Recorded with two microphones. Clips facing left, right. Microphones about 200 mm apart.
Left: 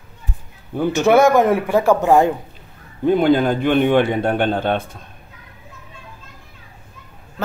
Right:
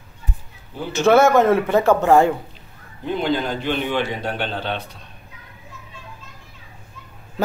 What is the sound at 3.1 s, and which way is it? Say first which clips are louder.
Speech: left 7 dB; 50° left (ahead or behind).